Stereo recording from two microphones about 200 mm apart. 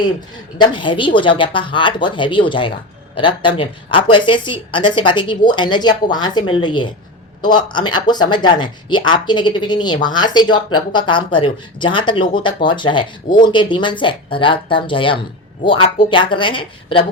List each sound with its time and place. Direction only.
0.6 s speech: 25° left (ahead or behind)